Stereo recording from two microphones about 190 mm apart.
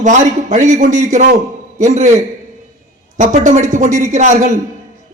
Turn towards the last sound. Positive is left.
turn(degrees=-40)  # may be behind; listen again after turning